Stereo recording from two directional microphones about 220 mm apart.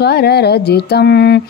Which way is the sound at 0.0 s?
50° left (ahead or behind).